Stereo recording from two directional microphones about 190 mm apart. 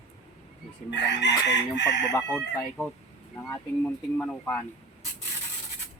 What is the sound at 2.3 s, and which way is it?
Speech, 5° left (ahead or behind).